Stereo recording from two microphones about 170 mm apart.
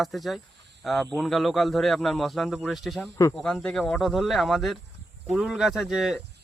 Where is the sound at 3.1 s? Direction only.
15° left (ahead or behind).